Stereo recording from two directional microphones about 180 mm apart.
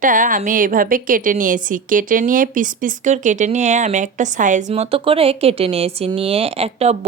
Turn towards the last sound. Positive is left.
turn(degrees=-35)  # may be behind; listen again after turning